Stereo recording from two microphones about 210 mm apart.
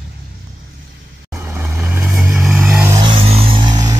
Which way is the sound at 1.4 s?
10° right (ahead or behind).